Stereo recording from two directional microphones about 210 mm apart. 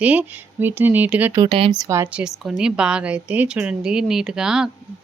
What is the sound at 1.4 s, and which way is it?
Speech, 25° right (ahead or behind).